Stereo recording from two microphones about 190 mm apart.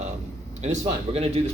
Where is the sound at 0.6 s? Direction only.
35° right (ahead or behind).